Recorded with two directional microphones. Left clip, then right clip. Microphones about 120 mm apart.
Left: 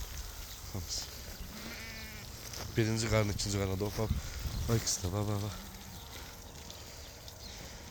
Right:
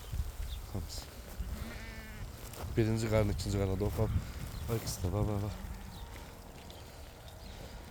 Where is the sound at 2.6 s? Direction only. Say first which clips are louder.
Even; 15° right (ahead or behind).